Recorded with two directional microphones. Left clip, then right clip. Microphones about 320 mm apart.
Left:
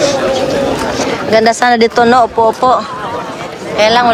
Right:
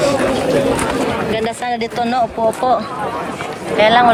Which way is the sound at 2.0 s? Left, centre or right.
Centre.